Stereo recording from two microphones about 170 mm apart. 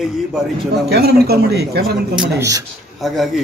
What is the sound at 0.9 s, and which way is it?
Speech, 70° right (ahead or behind).